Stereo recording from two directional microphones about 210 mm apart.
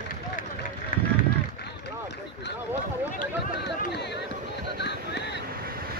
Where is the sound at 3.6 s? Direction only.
55° left (ahead or behind).